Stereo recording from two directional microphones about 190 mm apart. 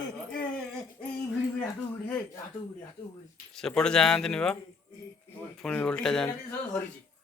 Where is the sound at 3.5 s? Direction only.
5° left (ahead or behind).